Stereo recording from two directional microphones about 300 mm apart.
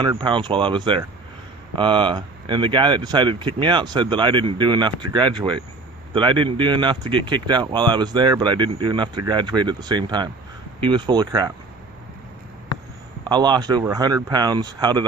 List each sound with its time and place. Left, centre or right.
0.0 s speech: centre
13.2 s speech: centre